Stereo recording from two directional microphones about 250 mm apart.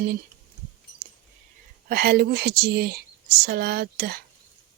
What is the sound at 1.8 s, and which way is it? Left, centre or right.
Speech, right.